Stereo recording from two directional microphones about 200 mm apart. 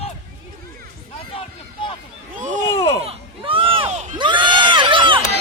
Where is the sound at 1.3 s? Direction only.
25° left (ahead or behind).